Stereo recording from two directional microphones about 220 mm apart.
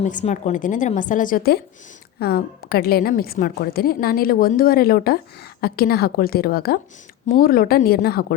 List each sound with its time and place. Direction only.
0.0 s a woman's voice: 35° left (ahead or behind)